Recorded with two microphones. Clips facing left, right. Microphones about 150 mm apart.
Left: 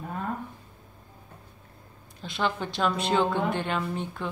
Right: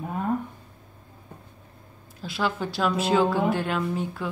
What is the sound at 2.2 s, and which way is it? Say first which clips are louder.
A woman's voice: right 1 dB; 5° right (ahead or behind).